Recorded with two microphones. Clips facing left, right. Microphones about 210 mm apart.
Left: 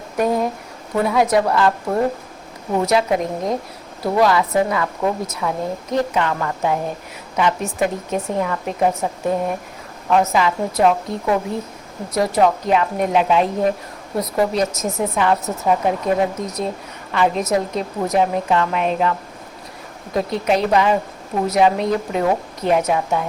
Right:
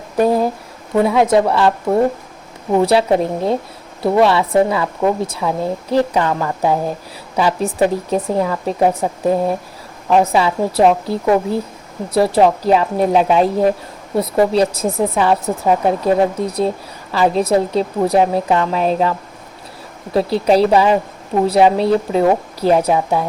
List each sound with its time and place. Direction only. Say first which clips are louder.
0.2 s a woman's voice: right 4 dB; 30° right (ahead or behind)
2.8 s a woman's voice: right 3 dB; 30° right (ahead or behind)
20.1 s speech: right 5 dB; 35° right (ahead or behind)